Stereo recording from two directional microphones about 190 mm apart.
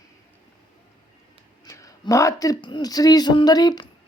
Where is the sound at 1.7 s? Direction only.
15° left (ahead or behind).